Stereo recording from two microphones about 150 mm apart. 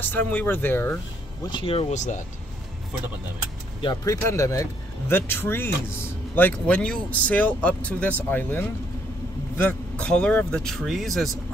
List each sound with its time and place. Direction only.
0.0 s speech: 10° left (ahead or behind)
1.4 s speech: 35° left (ahead or behind); by 2.2 s 50° left (ahead or behind)
3.8 s speech: 25° left (ahead or behind); by 11.2 s centre (ahead or behind)